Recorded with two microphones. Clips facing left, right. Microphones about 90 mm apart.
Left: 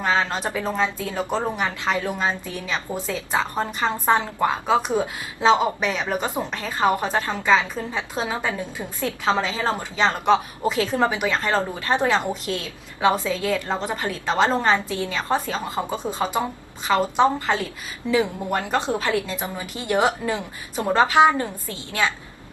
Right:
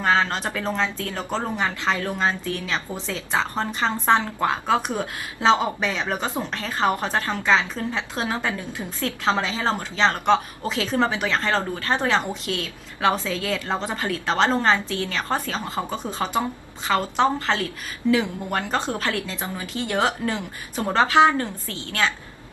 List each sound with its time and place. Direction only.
0.0 s a sound: 5° left (ahead or behind)
0.3 s a woman's voice: 15° left (ahead or behind)
13.7 s a woman's voice: centre (ahead or behind)
13.9 s a woman's voice: 15° left (ahead or behind)